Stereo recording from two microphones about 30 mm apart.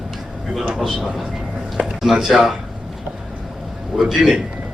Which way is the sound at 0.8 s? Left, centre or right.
Centre.